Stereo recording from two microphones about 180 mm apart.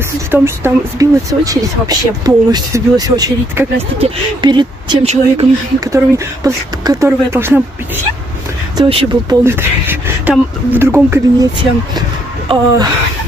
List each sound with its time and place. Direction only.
0.3 s speech: 15° right (ahead or behind)
5.0 s speech: 35° right (ahead or behind)
5.8 s speech: 15° right (ahead or behind)
8.7 s speech: 25° right (ahead or behind)
9.4 s speech: 15° right (ahead or behind)
12.4 s speech: 20° right (ahead or behind)